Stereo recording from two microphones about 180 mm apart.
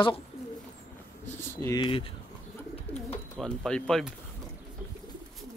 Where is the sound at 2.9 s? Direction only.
5° left (ahead or behind).